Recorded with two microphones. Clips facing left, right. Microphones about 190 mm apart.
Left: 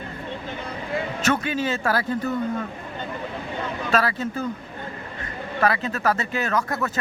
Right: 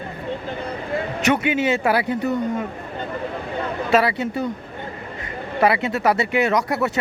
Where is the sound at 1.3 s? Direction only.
20° right (ahead or behind).